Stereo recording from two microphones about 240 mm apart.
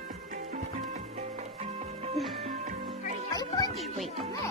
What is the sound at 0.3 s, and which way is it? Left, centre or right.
Music, right.